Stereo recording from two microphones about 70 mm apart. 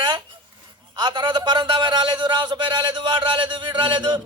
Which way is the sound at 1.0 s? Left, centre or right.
Right.